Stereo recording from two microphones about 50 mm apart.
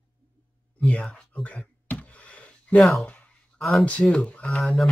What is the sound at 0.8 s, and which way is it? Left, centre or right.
Speech, left.